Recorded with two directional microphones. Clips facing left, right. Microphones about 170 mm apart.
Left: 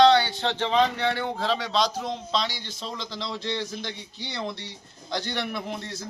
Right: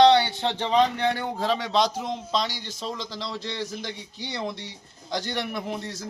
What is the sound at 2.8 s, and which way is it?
Speech, 10° right (ahead or behind).